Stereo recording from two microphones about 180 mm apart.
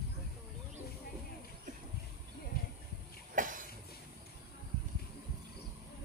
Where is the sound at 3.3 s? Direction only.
45° right (ahead or behind).